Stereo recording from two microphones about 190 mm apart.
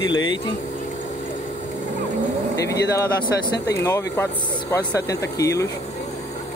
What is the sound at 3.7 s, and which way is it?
Speech, 15° left (ahead or behind).